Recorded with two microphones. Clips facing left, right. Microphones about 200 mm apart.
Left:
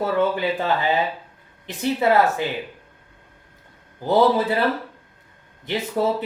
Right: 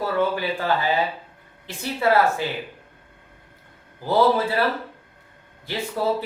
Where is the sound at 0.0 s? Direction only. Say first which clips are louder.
Left 2 dB; 20° left (ahead or behind).